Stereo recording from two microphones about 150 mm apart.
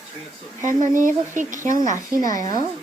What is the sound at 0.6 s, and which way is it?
Speech, 60° right (ahead or behind).